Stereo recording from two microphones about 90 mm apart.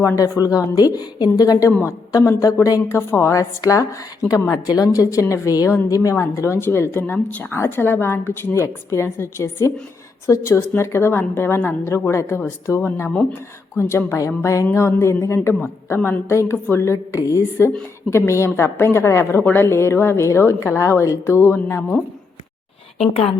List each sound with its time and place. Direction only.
0.2 s a woman's voice: 45° left (ahead or behind); by 16.0 s 25° left (ahead or behind)
16.0 s a woman's voice: 15° left (ahead or behind)
16.3 s a woman's voice: 30° left (ahead or behind)